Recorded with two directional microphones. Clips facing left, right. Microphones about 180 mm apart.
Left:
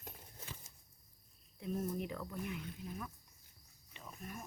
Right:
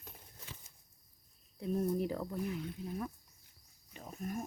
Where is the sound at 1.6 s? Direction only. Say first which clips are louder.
Right 6 dB; 35° right (ahead or behind).